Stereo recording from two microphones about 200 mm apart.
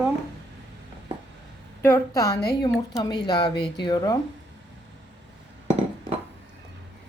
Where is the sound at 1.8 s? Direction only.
10° left (ahead or behind).